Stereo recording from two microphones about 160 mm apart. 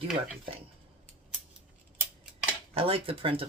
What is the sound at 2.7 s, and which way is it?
Speech, 35° right (ahead or behind).